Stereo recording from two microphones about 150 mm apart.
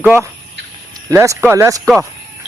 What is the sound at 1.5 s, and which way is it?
Speech, 20° right (ahead or behind).